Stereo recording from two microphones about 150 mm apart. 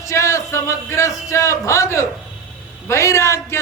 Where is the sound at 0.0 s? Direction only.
20° left (ahead or behind).